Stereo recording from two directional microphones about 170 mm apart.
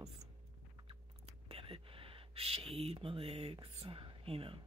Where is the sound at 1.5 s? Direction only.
35° right (ahead or behind).